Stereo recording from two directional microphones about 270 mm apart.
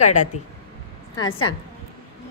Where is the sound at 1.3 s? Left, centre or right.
Left.